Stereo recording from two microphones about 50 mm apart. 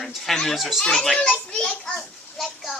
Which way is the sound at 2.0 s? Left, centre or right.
Centre.